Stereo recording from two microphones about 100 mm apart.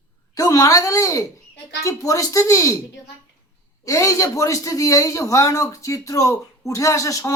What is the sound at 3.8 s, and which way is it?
Speech, 30° left (ahead or behind).